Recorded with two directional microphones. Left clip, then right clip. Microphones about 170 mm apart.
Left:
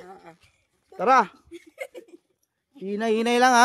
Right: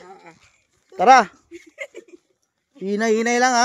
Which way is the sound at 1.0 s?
10° right (ahead or behind).